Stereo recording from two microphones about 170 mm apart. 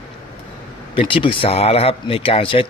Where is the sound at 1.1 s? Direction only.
30° left (ahead or behind).